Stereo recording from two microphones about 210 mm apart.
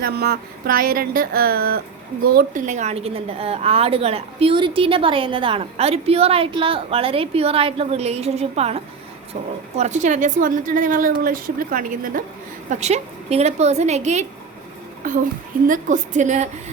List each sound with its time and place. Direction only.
0.0 s a woman's voice: 50° right (ahead or behind)